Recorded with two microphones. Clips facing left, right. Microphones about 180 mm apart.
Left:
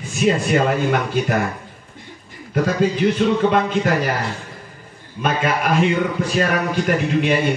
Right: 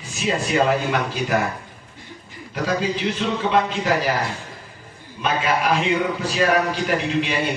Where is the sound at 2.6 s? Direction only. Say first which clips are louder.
Left 4 dB; 50° left (ahead or behind).